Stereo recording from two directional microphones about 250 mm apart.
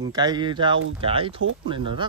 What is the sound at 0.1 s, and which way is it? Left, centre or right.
Speech, centre.